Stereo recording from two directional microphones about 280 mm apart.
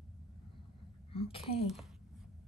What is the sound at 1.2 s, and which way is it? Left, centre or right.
Speech, centre.